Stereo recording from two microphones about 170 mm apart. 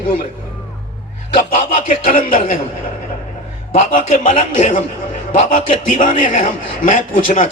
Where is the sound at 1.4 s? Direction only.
50° left (ahead or behind).